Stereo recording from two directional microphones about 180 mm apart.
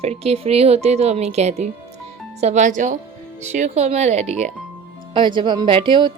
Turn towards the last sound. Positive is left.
turn(degrees=-25)  # may be behind; listen again after turning